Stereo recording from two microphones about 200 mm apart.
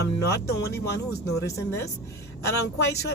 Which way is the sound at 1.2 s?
15° left (ahead or behind).